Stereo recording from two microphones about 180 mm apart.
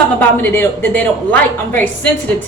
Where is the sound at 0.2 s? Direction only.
10° left (ahead or behind).